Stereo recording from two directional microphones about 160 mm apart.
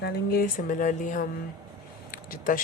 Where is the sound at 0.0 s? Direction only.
65° left (ahead or behind).